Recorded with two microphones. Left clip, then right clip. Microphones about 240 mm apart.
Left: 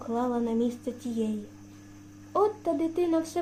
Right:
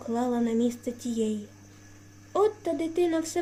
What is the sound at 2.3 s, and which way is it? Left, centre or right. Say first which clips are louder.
Speech: even; right.